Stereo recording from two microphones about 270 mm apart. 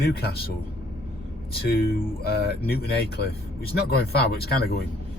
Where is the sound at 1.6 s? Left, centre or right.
Left.